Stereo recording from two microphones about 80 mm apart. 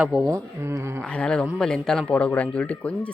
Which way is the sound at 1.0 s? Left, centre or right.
Centre.